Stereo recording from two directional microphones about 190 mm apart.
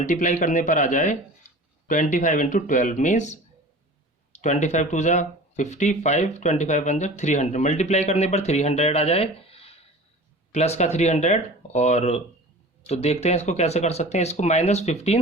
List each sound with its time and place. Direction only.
0.0 s speech: 40° left (ahead or behind)